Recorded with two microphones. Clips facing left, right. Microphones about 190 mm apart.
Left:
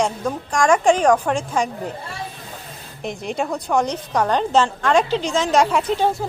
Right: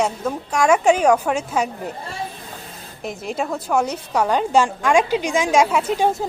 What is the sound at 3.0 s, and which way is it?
Speech, centre (ahead or behind).